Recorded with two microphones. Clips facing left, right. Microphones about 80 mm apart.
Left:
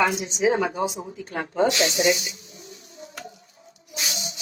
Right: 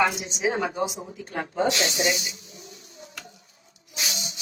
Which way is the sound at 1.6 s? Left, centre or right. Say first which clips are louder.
Left 4 dB; left.